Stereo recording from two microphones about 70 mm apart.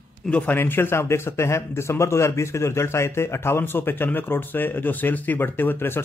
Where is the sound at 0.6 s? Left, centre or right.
Left.